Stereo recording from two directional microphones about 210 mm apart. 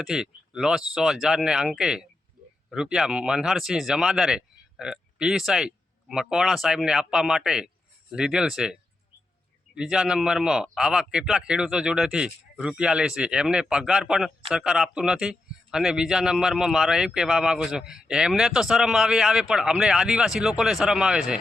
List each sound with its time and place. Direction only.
0.0 s a man's voice: centre (ahead or behind)